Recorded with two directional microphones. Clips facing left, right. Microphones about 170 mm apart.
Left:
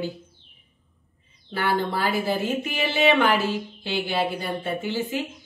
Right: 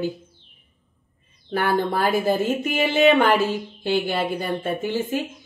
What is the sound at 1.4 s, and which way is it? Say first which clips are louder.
Speech: right 3 dB; 50° right (ahead or behind).